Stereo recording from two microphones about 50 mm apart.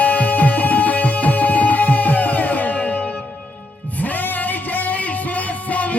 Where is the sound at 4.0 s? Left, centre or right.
Left.